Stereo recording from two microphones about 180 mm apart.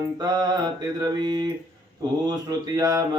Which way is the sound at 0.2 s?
20° right (ahead or behind).